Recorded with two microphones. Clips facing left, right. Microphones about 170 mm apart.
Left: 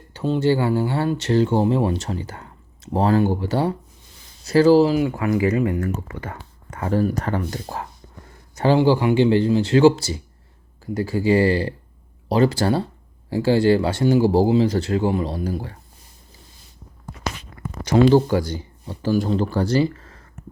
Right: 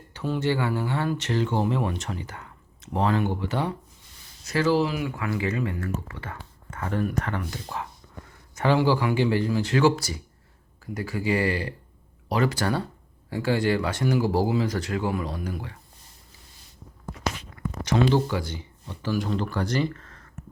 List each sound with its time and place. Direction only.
0.1 s speech: 30° left (ahead or behind)
17.5 s a sound: 35° left (ahead or behind)
17.8 s speech: 35° left (ahead or behind)